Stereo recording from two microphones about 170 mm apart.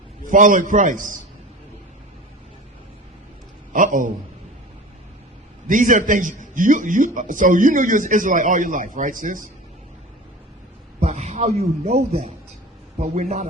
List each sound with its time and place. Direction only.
0.3 s a man's voice: 50° right (ahead or behind)
3.7 s a man's voice: 50° right (ahead or behind)
5.6 s a man's voice: 50° right (ahead or behind)
11.0 s speech: 40° right (ahead or behind)
13.0 s a man's voice: 45° right (ahead or behind)